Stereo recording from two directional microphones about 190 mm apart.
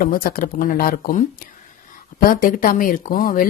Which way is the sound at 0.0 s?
50° left (ahead or behind).